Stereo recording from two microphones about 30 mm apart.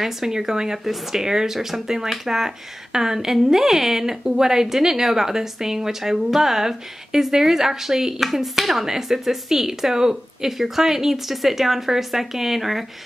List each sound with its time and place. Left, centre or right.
0.3 s speech: centre